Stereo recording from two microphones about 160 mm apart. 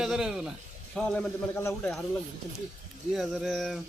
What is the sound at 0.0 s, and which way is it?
A man's voice, 5° right (ahead or behind).